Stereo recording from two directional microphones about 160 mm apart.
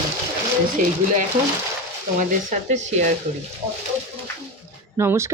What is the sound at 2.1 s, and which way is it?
Speech, 50° right (ahead or behind).